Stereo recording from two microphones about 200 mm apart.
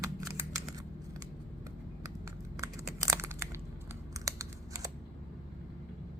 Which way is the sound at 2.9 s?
15° right (ahead or behind).